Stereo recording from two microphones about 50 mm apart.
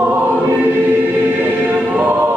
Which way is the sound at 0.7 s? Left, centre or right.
Right.